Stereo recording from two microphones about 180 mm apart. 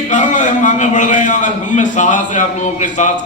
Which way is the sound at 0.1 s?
45° left (ahead or behind).